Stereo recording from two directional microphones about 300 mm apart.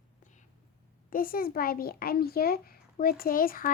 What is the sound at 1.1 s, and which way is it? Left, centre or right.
Speech, left.